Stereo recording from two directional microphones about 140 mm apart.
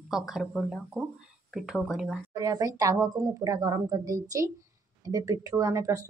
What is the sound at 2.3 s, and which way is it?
A woman's voice, 25° right (ahead or behind).